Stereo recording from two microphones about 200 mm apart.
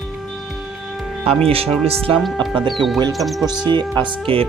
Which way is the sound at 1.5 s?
30° right (ahead or behind).